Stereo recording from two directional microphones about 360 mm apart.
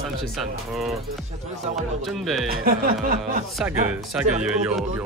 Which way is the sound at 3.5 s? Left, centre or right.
Centre.